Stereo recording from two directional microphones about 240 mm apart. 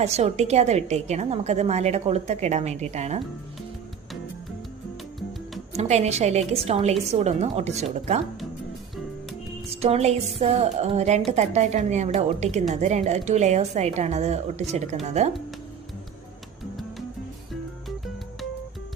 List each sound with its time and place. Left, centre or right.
0.0 s a woman's voice: right
5.7 s a woman's voice: right
9.6 s a woman's voice: right
17.5 s music: centre